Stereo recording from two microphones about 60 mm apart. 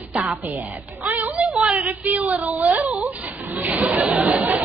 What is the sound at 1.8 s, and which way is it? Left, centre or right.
Speech, right.